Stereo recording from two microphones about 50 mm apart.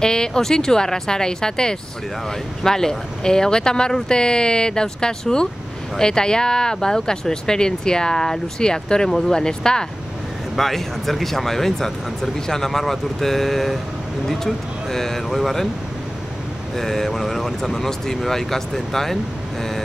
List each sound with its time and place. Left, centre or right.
0.0 s speech: centre
10.5 s speech: centre
16.7 s speech: centre